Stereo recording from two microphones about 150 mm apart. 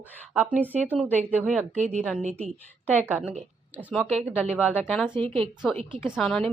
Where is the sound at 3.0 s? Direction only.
10° right (ahead or behind).